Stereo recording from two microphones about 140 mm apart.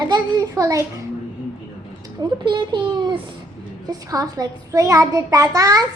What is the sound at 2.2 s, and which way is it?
A child's voice, 35° right (ahead or behind).